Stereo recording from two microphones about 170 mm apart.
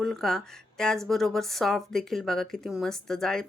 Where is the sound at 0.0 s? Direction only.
Centre (ahead or behind).